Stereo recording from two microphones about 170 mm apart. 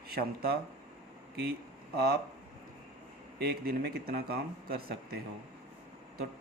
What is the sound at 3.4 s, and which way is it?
Speech, 65° right (ahead or behind).